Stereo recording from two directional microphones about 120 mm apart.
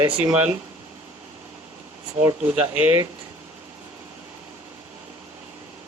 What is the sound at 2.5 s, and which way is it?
Speech, 15° right (ahead or behind).